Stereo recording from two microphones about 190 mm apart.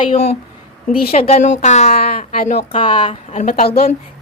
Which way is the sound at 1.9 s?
50° left (ahead or behind).